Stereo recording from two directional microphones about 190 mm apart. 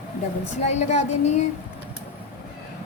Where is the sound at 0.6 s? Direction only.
35° left (ahead or behind).